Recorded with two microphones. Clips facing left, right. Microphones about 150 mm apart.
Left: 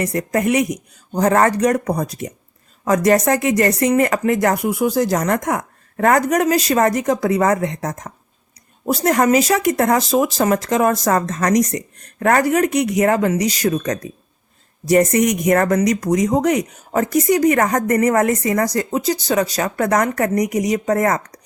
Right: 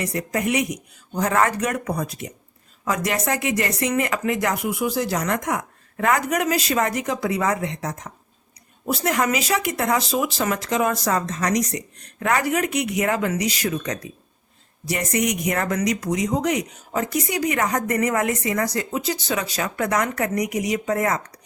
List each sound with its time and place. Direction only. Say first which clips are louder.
0.0 s speech: left 5 dB; 45° left (ahead or behind)